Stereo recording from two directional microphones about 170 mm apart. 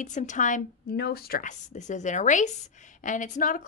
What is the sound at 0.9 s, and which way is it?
A woman's voice, 65° left (ahead or behind).